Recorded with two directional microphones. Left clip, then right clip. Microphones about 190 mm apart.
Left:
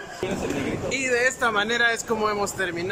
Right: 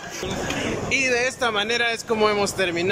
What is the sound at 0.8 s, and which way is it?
Speech, centre (ahead or behind).